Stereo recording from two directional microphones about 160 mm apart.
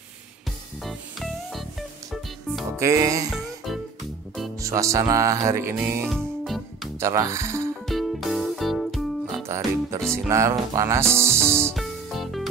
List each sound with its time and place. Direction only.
0.8 s music: centre (ahead or behind)
2.8 s speech: 20° right (ahead or behind)
3.3 s music: centre (ahead or behind)
4.6 s speech: 20° right (ahead or behind)
6.0 s music: centre (ahead or behind)
7.0 s speech: 15° right (ahead or behind)
7.8 s music: centre (ahead or behind)
9.5 s speech: 20° right (ahead or behind)
11.7 s music: centre (ahead or behind)